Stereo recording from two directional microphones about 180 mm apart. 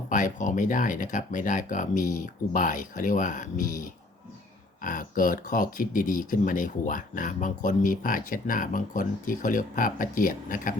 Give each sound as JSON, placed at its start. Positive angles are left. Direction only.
{"t": 0.1, "sound": "speech", "side_deg": 45}